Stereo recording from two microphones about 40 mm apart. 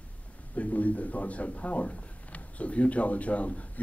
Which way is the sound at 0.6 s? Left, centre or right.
Left.